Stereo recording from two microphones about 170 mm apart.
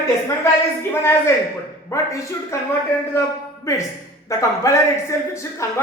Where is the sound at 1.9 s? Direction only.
20° left (ahead or behind).